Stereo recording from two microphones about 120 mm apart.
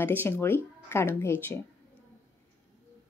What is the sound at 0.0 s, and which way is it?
Speech, 15° left (ahead or behind).